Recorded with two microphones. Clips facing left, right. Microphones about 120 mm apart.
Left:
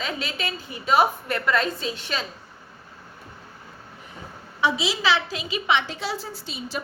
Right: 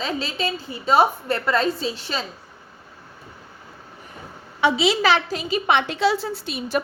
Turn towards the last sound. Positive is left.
turn(degrees=-60)  # may be behind; listen again after turning